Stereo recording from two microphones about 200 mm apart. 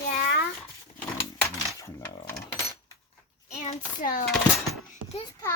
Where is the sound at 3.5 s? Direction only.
35° left (ahead or behind).